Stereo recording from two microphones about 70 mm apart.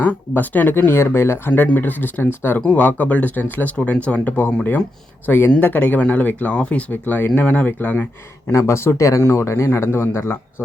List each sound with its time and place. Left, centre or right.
0.0 s speech: left
6.9 s speech: left
8.5 s speech: left
9.2 s a man's voice: left